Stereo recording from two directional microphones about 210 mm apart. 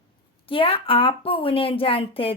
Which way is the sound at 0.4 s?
25° left (ahead or behind).